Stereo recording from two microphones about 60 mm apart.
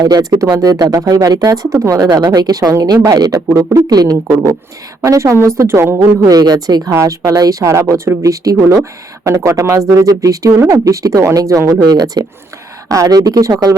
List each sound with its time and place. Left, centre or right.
0.0 s speech: right
0.6 s speech: right
1.7 s speech: right
5.0 s speech: right
5.5 s a woman's voice: right
6.0 s speech: right
6.9 s speech: right
7.7 s speech: right